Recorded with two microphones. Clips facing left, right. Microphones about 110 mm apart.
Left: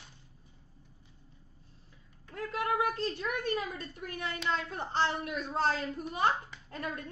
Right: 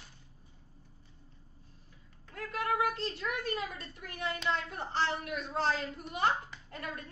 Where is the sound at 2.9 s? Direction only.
30° left (ahead or behind).